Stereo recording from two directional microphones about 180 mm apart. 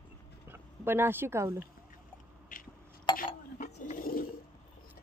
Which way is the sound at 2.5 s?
50° left (ahead or behind).